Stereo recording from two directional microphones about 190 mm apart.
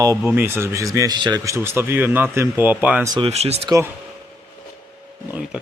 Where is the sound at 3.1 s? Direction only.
30° right (ahead or behind).